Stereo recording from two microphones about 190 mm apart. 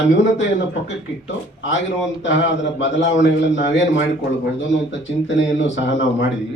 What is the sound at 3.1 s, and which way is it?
Speech, 70° left (ahead or behind).